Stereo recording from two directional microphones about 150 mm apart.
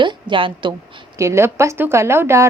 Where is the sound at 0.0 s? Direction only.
30° right (ahead or behind).